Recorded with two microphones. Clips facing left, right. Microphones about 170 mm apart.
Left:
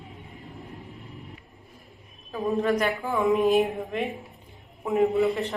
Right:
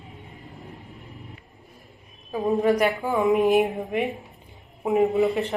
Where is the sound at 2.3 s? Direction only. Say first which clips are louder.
Right 3 dB; 20° right (ahead or behind).